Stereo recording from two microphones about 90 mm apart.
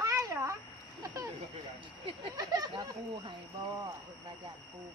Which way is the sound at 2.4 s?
40° right (ahead or behind).